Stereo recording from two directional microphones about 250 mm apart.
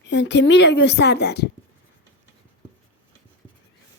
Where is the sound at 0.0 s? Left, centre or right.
Left.